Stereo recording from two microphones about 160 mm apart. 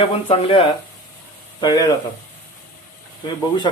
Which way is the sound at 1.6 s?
25° left (ahead or behind).